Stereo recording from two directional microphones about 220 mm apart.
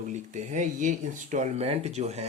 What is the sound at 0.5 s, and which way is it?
Speech, 35° right (ahead or behind).